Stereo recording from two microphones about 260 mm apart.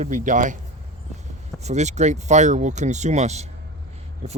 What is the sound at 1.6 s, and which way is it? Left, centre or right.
A man's voice, right.